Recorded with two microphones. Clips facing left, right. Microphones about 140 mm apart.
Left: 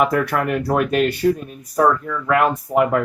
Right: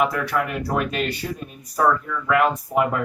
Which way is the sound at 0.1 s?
55° left (ahead or behind).